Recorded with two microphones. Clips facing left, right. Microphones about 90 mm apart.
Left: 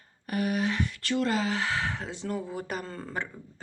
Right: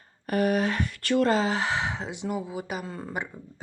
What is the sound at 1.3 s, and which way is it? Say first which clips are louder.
Speech: right 4 dB; 30° right (ahead or behind).